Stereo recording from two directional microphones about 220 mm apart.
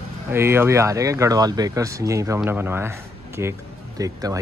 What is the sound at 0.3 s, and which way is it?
Speech, 10° right (ahead or behind).